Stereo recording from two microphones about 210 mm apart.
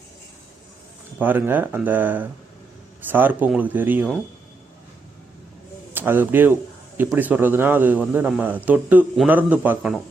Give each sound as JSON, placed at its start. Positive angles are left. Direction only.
{"t": 1.2, "sound": "speech", "side_deg": -10}
{"t": 5.9, "sound": "a man's voice", "side_deg": -10}